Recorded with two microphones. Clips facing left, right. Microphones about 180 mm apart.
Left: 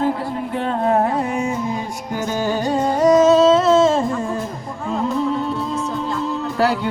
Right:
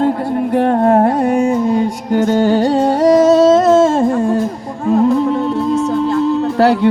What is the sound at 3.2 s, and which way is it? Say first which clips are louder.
Music: right 4 dB; 45° right (ahead or behind).